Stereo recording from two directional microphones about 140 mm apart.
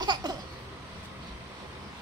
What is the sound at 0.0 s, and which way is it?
Laughter, 30° right (ahead or behind).